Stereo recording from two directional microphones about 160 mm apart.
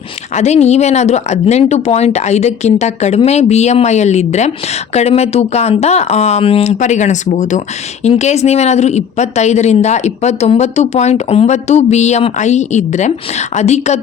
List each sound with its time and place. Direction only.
0.3 s speech: 45° left (ahead or behind)